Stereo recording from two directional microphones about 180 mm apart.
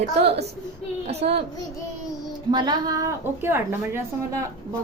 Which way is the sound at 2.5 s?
20° right (ahead or behind).